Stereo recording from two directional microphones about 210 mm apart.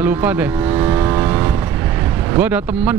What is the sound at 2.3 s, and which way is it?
Speech, 10° right (ahead or behind).